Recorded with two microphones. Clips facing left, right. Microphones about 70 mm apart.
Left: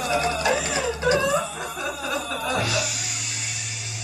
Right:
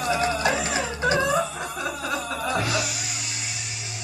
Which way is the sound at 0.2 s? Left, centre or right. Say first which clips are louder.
Even; right.